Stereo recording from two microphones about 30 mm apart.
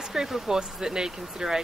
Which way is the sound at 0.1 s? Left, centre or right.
Centre.